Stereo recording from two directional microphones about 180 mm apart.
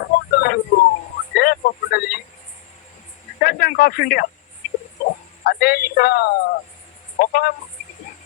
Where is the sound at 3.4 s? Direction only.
60° left (ahead or behind).